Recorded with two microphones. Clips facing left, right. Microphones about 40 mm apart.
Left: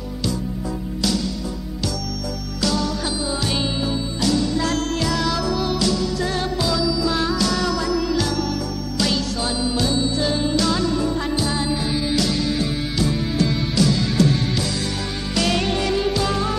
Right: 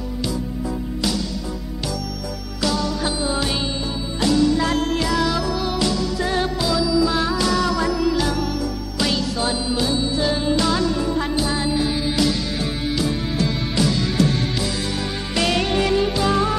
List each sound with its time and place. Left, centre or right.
4.2 s music: centre
5.8 s music: centre